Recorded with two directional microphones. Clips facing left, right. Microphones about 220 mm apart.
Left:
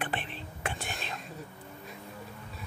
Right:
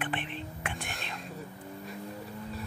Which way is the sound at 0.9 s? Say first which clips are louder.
Left 1 dB; centre (ahead or behind).